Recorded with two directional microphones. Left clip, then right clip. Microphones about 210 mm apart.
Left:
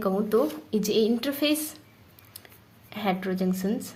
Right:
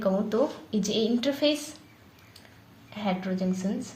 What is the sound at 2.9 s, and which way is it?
A woman's voice, 50° left (ahead or behind).